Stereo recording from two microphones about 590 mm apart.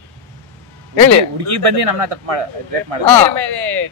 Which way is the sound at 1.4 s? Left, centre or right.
Right.